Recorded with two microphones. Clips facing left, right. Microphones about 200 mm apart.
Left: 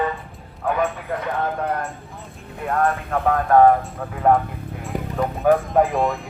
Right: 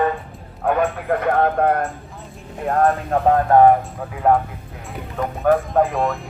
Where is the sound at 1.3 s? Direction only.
55° right (ahead or behind).